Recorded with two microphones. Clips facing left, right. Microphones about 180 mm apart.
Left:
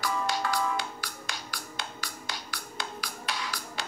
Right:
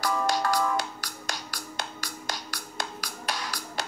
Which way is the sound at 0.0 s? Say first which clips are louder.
Right 4 dB; 45° right (ahead or behind).